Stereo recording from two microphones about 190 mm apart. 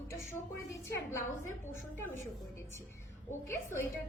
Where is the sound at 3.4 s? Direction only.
15° left (ahead or behind).